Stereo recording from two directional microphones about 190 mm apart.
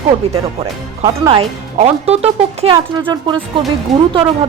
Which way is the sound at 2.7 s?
20° right (ahead or behind).